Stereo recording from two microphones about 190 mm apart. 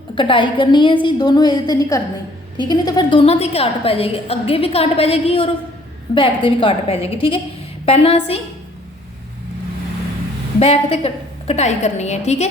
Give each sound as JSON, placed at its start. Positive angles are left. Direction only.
{"t": 0.2, "sound": "a woman's voice", "side_deg": 25}
{"t": 10.6, "sound": "a woman's voice", "side_deg": 35}